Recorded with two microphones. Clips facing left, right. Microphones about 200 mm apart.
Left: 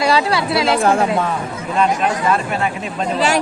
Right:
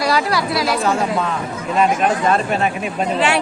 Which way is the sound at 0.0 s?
25° left (ahead or behind).